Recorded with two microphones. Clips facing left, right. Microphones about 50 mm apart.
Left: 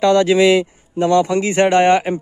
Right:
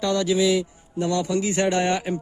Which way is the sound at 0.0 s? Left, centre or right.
Left.